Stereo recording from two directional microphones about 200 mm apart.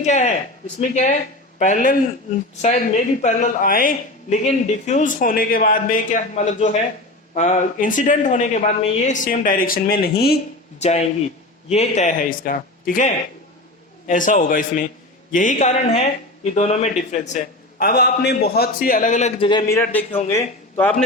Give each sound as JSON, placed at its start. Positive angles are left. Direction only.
{"t": 0.0, "sound": "a man's voice", "side_deg": 35}
{"t": 10.8, "sound": "a man's voice", "side_deg": 35}
{"t": 19.5, "sound": "a man's voice", "side_deg": 20}